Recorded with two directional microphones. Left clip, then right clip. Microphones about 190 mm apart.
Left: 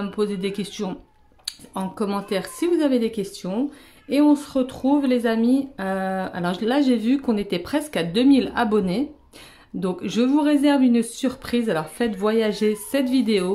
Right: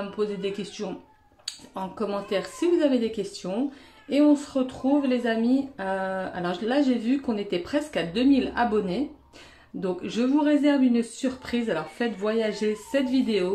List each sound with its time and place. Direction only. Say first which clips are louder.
0.1 s a woman's voice: left 4 dB; 35° left (ahead or behind)